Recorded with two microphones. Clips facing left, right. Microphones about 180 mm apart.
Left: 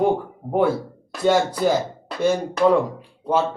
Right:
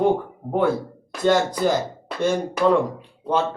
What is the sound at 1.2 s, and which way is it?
Speech, 10° left (ahead or behind).